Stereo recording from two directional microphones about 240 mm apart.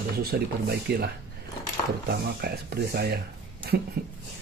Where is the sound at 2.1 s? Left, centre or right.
Right.